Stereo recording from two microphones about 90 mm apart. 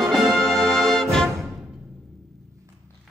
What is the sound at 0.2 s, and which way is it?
Music, 25° right (ahead or behind).